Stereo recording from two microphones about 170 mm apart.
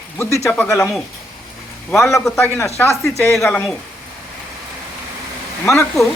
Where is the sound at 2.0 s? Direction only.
15° left (ahead or behind).